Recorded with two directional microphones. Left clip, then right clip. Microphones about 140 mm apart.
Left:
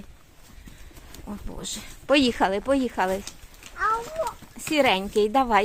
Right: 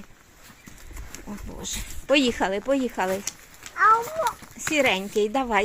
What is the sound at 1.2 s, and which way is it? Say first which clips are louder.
Speech: even; 15° left (ahead or behind).